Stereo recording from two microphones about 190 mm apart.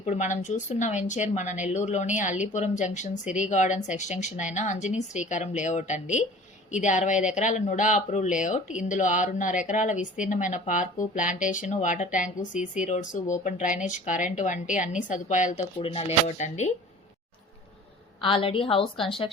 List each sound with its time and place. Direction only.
0.0 s speech: 40° left (ahead or behind)
18.2 s a woman's voice: 30° left (ahead or behind)